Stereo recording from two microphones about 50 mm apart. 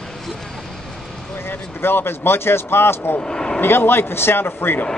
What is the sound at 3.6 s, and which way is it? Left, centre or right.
Speech, left.